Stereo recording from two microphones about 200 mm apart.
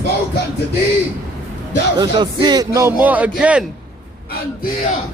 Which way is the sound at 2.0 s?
20° right (ahead or behind).